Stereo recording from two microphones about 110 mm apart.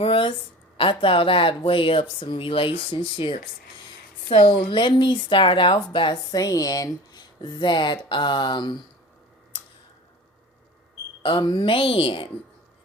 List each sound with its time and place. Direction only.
0.0 s a sound: 55° left (ahead or behind)
0.8 s speech: 50° left (ahead or behind)
6.3 s speech: 35° left (ahead or behind)
11.2 s speech: 45° left (ahead or behind)